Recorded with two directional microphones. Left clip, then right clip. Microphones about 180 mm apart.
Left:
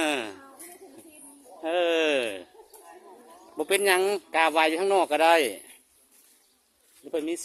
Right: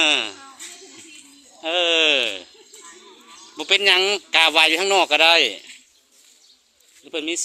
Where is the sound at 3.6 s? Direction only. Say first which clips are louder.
Right 6 dB; 25° left (ahead or behind).